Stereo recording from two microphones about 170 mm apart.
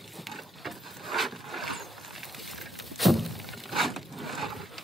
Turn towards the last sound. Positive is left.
turn(degrees=0)  # may be behind; listen again after turning